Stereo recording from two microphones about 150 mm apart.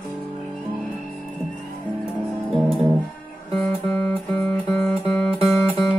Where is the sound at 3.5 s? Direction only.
10° left (ahead or behind).